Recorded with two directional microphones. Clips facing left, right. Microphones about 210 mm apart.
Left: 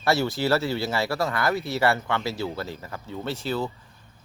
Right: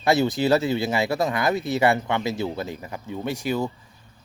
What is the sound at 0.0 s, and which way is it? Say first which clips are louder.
Speech: right 3 dB; 15° right (ahead or behind).